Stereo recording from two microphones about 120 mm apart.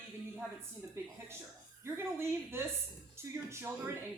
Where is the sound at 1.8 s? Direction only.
20° right (ahead or behind).